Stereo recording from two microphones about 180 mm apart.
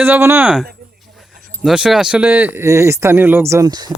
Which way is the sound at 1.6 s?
5° right (ahead or behind).